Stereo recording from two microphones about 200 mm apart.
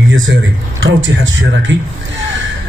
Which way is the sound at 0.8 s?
70° right (ahead or behind).